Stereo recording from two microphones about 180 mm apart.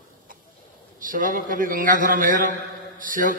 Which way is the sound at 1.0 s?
50° right (ahead or behind).